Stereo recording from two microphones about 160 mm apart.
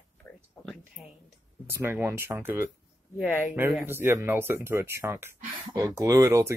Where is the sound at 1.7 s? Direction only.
15° right (ahead or behind).